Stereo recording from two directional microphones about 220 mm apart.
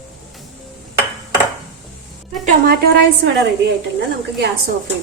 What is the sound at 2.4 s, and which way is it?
A woman's voice, 45° right (ahead or behind).